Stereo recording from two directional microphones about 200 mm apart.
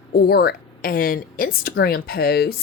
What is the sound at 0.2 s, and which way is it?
Speech, 50° left (ahead or behind).